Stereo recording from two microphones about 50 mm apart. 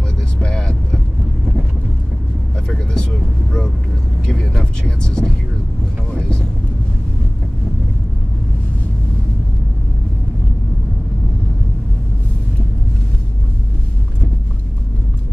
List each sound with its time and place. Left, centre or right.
0.4 s vehicle: centre
2.7 s vehicle: centre